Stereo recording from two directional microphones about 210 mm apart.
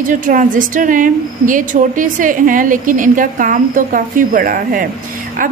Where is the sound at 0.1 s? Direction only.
40° right (ahead or behind).